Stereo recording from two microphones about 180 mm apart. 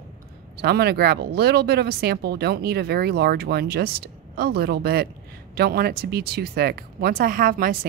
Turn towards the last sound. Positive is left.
turn(degrees=-50)  # may be behind; listen again after turning